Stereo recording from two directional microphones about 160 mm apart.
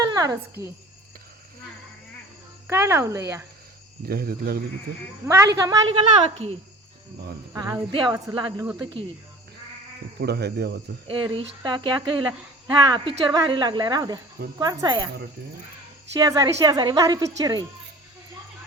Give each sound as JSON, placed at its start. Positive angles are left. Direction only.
{"t": 0.0, "sound": "a sound", "side_deg": -25}
{"t": 2.6, "sound": "speech", "side_deg": -15}
{"t": 4.0, "sound": "speech", "side_deg": -70}
{"t": 5.2, "sound": "a woman's voice", "side_deg": -15}
{"t": 5.9, "sound": "speech", "side_deg": -35}
{"t": 7.5, "sound": "speech", "side_deg": -25}
{"t": 10.2, "sound": "speech", "side_deg": -90}
{"t": 11.1, "sound": "speech", "side_deg": -30}
{"t": 16.1, "sound": "speech", "side_deg": -20}